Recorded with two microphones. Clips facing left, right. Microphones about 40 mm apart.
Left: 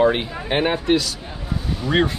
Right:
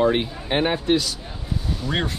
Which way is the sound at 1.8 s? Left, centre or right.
Centre.